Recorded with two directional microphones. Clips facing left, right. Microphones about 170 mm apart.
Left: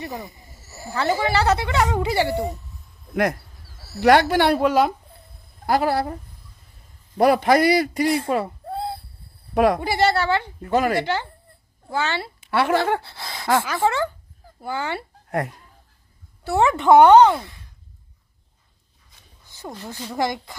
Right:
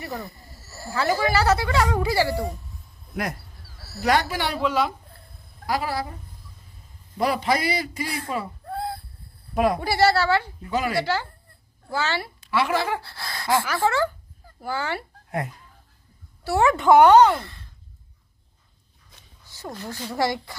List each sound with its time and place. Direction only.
0.0 s speech: 20° left (ahead or behind)
3.8 s a sound: 15° left (ahead or behind)
4.0 s a man's voice: 65° left (ahead or behind)
4.5 s a woman's voice: 45° left (ahead or behind)
7.2 s a man's voice: 55° left (ahead or behind)
8.6 s a sound: 25° left (ahead or behind)
9.6 s speech: 70° left (ahead or behind)
9.8 s speech: 20° left (ahead or behind)
10.6 s a woman's voice: 50° left (ahead or behind)
11.0 s speech: 20° left (ahead or behind)
12.5 s a man's voice: 55° left (ahead or behind)
13.0 s speech: 20° left (ahead or behind)
16.4 s speech: 25° left (ahead or behind)
19.5 s speech: 15° left (ahead or behind)